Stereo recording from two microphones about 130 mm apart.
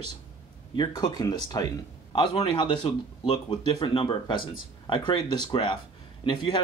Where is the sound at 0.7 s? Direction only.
30° left (ahead or behind).